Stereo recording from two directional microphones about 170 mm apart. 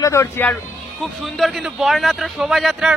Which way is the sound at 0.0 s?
15° left (ahead or behind).